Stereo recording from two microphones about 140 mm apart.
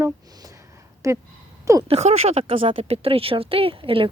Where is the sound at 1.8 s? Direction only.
45° right (ahead or behind).